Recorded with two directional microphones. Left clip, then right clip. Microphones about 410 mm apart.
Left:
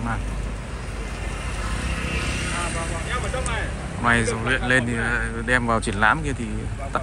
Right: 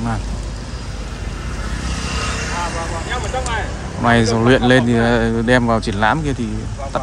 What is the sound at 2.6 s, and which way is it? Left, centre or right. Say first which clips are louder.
Vehicle: right 5 dB; right.